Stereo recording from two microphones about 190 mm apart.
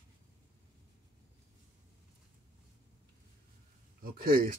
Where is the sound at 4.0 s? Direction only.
50° right (ahead or behind).